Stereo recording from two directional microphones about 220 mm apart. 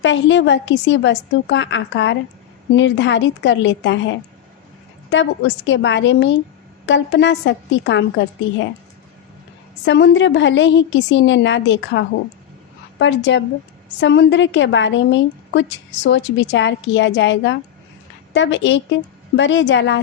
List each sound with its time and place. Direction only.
0.0 s a woman's voice: 55° left (ahead or behind)
5.1 s a woman's voice: 55° left (ahead or behind)
9.8 s a woman's voice: 55° left (ahead or behind)